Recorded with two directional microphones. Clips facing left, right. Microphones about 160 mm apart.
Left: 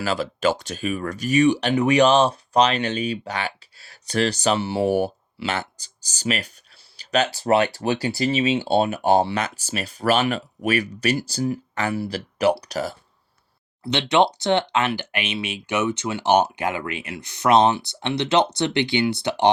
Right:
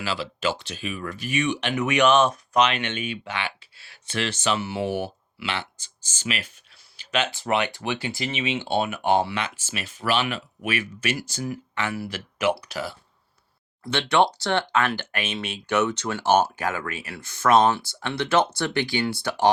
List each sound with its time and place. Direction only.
0.0 s speech: 45° left (ahead or behind)
13.8 s speech: 15° left (ahead or behind)